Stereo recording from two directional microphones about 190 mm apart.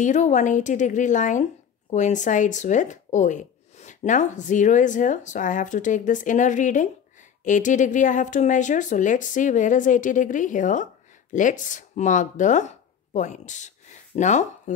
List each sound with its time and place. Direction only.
0.0 s speech: 40° left (ahead or behind)